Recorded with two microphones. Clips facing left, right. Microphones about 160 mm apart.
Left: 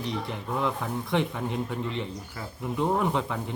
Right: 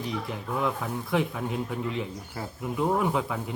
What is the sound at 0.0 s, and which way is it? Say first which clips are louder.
A man's voice: even; 5° right (ahead or behind).